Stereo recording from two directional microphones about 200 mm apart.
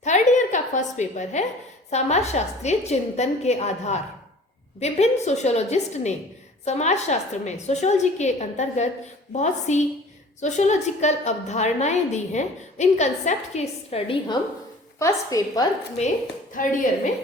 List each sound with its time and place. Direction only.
0.0 s a sound: 35° left (ahead or behind)
1.9 s a woman's voice: 35° left (ahead or behind)
14.9 s a woman's voice: 15° left (ahead or behind)
16.6 s a woman's voice: 45° left (ahead or behind)